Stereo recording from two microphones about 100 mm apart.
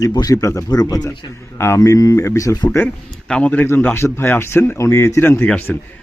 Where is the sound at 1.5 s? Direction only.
25° left (ahead or behind).